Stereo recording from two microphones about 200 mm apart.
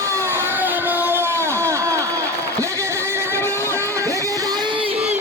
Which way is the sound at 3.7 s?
15° right (ahead or behind).